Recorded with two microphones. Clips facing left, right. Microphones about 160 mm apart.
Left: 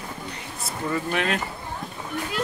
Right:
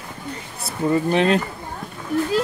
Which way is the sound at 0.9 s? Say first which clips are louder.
Right 8 dB; 30° right (ahead or behind).